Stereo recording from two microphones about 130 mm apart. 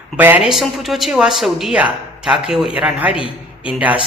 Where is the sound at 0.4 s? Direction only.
Centre (ahead or behind).